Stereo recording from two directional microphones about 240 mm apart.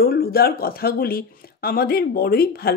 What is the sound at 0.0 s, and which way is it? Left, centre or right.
Speech, left.